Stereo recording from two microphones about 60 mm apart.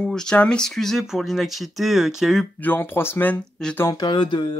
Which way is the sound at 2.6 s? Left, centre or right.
Left.